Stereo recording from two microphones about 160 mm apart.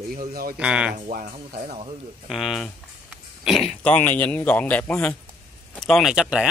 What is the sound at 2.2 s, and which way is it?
Speech, centre (ahead or behind).